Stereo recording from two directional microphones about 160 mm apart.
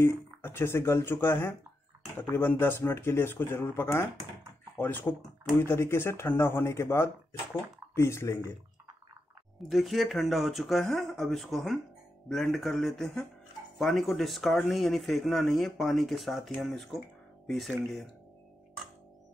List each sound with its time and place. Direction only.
0.0 s speech: 15° left (ahead or behind)
9.6 s speech: centre (ahead or behind)